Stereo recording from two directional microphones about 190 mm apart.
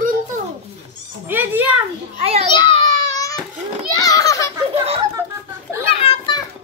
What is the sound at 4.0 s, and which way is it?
Children playing, 20° left (ahead or behind).